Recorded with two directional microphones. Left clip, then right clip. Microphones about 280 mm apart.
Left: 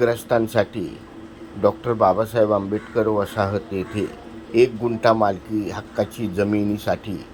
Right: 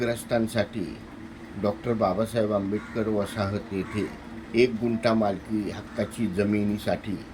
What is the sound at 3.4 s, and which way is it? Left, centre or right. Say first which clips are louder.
Speech: left 7 dB; centre.